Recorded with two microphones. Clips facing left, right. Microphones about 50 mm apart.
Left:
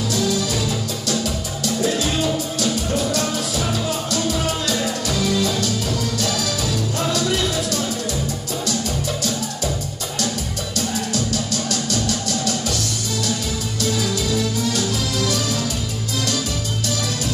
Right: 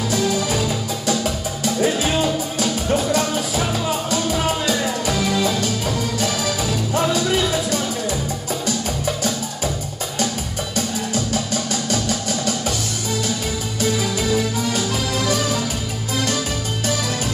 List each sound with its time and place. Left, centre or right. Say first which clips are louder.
0.1 s music: right 2 dB; right
10.8 s music: even; centre
13.7 s music: right 1 dB; centre